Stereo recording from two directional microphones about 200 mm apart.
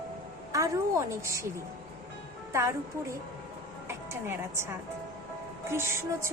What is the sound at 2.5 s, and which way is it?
Speech, 15° right (ahead or behind).